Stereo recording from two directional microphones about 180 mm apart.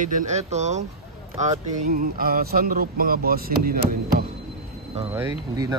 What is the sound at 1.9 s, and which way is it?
Speech, 55° right (ahead or behind).